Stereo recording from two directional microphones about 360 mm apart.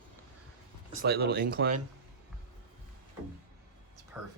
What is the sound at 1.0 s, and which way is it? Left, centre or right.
Speech, right.